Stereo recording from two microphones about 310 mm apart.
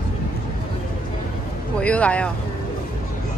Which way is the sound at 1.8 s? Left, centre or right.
Centre.